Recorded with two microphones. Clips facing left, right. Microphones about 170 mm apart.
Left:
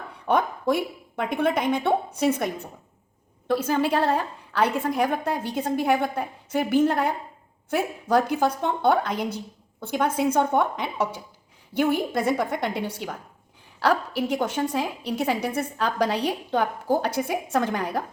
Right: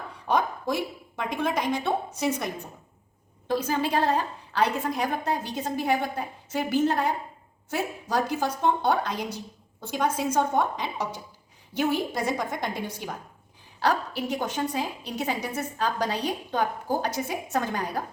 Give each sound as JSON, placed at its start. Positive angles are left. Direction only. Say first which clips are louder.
{"t": 0.3, "sound": "a woman's voice", "louder": "left 3 dB", "side_deg": 60}
{"t": 13.8, "sound": "a woman's voice", "louder": "left 3 dB", "side_deg": 55}